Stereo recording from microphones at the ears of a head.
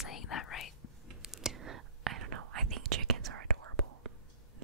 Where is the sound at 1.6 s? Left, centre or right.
Right.